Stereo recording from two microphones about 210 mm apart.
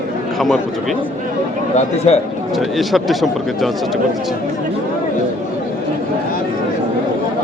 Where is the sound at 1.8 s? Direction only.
30° left (ahead or behind).